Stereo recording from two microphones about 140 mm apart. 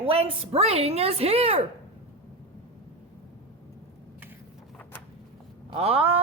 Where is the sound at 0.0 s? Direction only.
40° right (ahead or behind).